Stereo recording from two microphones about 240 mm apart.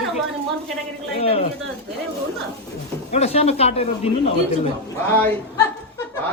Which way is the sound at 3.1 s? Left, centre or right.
Left.